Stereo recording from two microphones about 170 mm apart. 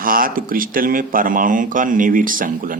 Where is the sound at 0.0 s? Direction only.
55° right (ahead or behind).